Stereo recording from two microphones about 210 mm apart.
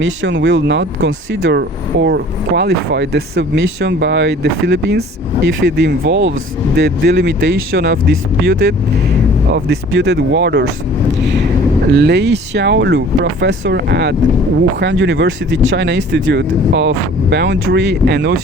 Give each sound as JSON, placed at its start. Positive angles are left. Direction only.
{"t": 0.0, "sound": "speech", "side_deg": -65}
{"t": 11.9, "sound": "speech", "side_deg": -50}